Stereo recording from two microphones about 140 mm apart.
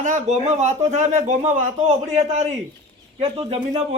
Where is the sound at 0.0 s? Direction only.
60° right (ahead or behind).